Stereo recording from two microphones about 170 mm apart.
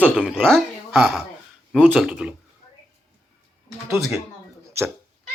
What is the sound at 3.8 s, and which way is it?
Speech, 15° right (ahead or behind).